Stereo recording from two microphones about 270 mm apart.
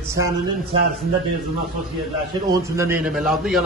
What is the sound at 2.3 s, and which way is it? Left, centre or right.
A man's voice, centre.